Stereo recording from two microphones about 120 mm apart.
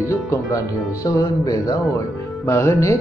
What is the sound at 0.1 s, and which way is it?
Speech, 25° left (ahead or behind).